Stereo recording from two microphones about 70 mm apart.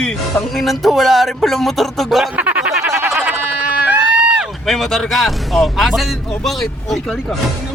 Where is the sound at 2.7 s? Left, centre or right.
Centre.